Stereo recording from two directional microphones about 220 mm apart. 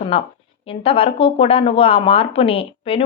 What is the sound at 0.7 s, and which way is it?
A woman's voice, 25° left (ahead or behind).